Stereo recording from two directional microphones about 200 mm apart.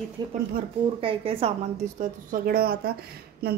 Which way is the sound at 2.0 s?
45° right (ahead or behind).